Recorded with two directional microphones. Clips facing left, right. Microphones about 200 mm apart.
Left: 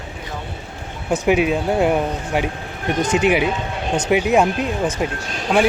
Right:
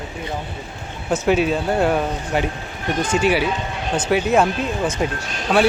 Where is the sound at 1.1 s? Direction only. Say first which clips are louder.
Left 1 dB; 15° left (ahead or behind).